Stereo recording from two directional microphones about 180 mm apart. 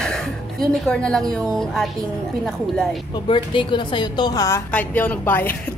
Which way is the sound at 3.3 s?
25° left (ahead or behind).